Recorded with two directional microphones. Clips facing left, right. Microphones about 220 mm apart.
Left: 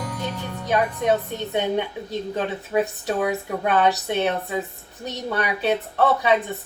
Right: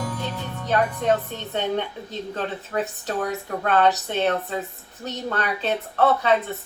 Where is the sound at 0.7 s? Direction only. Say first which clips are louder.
Left 1 dB; 10° left (ahead or behind).